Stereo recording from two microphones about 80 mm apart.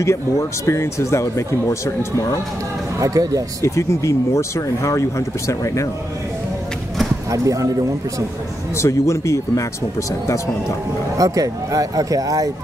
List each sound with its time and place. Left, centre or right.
0.0 s speech: left
3.0 s speech: right
3.6 s speech: left
7.2 s speech: right
8.7 s speech: left
11.1 s speech: right